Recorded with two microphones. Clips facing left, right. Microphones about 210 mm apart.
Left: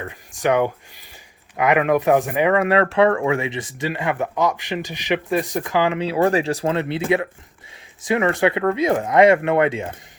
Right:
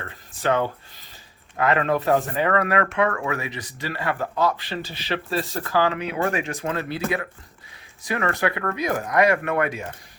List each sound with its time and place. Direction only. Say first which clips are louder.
0.0 s speech: left 4 dB; 15° left (ahead or behind)
6.1 s speech: left 7 dB; 35° left (ahead or behind)
6.7 s speech: left 6 dB; 25° left (ahead or behind)